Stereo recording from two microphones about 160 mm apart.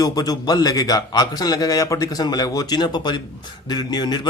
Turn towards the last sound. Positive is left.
turn(degrees=25)  # may be behind; listen again after turning